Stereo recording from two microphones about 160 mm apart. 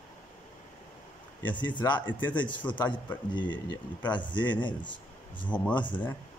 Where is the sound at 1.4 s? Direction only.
30° left (ahead or behind).